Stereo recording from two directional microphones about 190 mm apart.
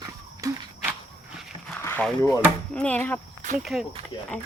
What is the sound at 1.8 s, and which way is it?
Speech, 10° left (ahead or behind).